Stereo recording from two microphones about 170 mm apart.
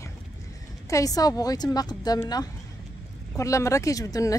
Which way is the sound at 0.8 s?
20° left (ahead or behind).